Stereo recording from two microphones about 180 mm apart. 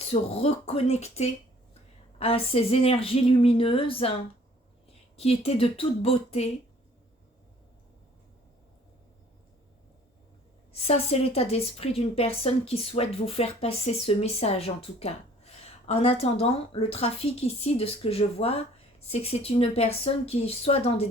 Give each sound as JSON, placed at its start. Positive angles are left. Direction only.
{"t": 0.0, "sound": "a woman's voice", "side_deg": 35}
{"t": 5.1, "sound": "a woman's voice", "side_deg": 35}
{"t": 10.7, "sound": "a woman's voice", "side_deg": 35}